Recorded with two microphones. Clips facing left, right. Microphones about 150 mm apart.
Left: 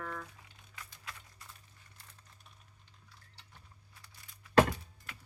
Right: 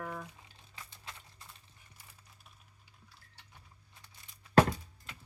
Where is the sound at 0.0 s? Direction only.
15° right (ahead or behind).